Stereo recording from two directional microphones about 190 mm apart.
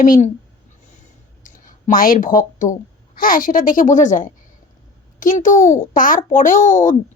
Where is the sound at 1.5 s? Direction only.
45° left (ahead or behind).